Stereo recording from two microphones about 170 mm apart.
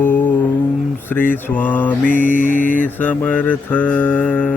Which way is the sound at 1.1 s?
10° left (ahead or behind).